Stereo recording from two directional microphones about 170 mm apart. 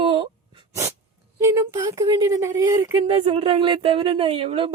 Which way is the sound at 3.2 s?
35° right (ahead or behind).